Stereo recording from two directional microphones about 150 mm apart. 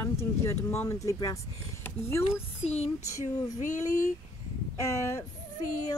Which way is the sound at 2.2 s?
40° left (ahead or behind).